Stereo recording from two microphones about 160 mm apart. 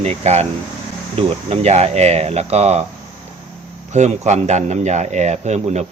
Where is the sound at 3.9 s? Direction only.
45° right (ahead or behind).